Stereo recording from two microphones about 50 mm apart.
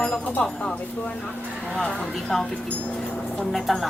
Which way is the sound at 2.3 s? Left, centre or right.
Centre.